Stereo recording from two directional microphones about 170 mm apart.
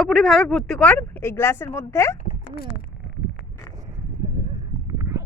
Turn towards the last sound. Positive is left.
turn(degrees=-15)  # may be behind; listen again after turning